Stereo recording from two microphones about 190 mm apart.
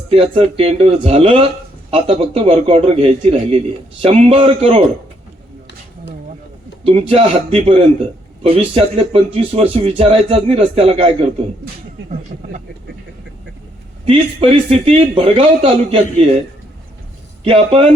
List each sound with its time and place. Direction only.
0.1 s speech: 30° right (ahead or behind)
6.8 s a man's voice: 30° right (ahead or behind)
14.1 s a man's voice: 30° right (ahead or behind)
17.4 s speech: 30° right (ahead or behind)